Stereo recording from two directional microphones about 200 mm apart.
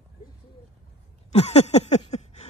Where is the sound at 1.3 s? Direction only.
30° left (ahead or behind).